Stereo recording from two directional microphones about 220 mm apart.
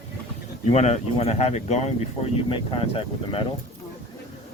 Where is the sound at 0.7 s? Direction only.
30° left (ahead or behind).